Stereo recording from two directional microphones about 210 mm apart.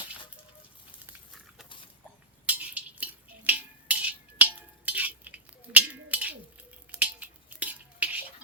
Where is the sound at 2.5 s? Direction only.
5° right (ahead or behind).